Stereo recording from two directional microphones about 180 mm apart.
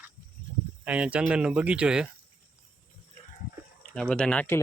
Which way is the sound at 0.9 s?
5° right (ahead or behind).